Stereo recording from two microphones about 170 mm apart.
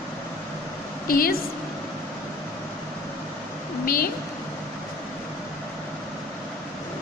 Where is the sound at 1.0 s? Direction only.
60° left (ahead or behind).